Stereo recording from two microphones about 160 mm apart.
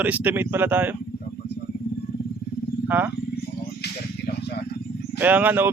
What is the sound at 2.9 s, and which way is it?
Speech, 10° right (ahead or behind).